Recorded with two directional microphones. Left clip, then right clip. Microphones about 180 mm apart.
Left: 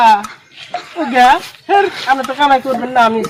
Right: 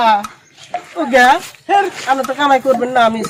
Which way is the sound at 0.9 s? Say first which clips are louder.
Left 1 dB; 15° right (ahead or behind).